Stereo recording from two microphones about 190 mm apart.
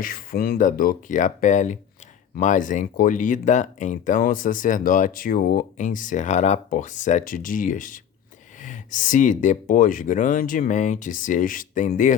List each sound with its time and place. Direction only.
0.0 s speech: 50° left (ahead or behind)